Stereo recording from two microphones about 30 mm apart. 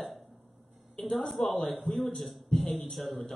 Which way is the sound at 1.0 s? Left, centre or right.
Centre.